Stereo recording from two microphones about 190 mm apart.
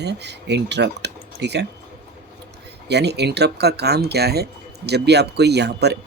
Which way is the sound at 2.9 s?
60° right (ahead or behind).